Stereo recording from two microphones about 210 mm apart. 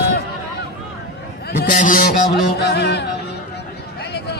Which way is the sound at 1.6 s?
40° left (ahead or behind).